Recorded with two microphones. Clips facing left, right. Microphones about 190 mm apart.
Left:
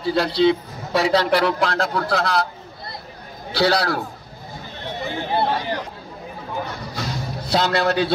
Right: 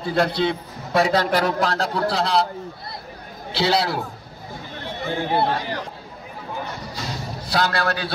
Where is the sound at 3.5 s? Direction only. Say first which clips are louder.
Left 2 dB; 25° right (ahead or behind).